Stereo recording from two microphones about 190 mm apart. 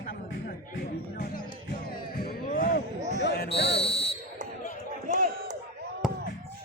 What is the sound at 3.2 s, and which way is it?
Basketball bounce, 55° left (ahead or behind).